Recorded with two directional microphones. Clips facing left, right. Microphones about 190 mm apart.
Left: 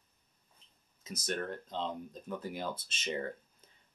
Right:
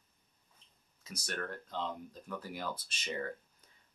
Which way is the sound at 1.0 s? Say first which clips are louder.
Left 4 dB; 20° left (ahead or behind).